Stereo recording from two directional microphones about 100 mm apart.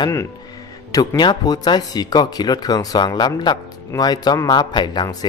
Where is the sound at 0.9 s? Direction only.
40° left (ahead or behind).